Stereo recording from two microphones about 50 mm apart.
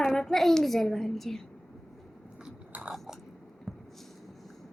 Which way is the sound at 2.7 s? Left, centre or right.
Right.